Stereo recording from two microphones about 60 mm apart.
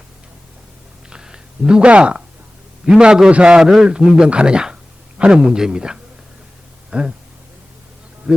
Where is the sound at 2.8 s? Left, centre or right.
Centre.